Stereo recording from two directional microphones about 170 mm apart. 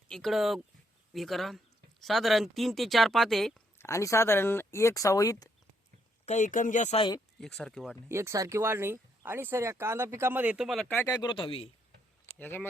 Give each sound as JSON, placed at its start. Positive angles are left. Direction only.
{"t": 0.1, "sound": "speech", "side_deg": 0}
{"t": 3.8, "sound": "speech", "side_deg": 15}
{"t": 6.2, "sound": "speech", "side_deg": 45}
{"t": 7.3, "sound": "speech", "side_deg": 5}
{"t": 8.1, "sound": "speech", "side_deg": -15}
{"t": 10.8, "sound": "speech", "side_deg": 10}
{"t": 11.2, "sound": "a man's voice", "side_deg": 30}
{"t": 12.4, "sound": "speech", "side_deg": 10}